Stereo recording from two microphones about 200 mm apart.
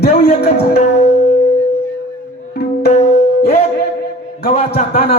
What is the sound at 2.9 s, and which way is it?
Music, 35° left (ahead or behind).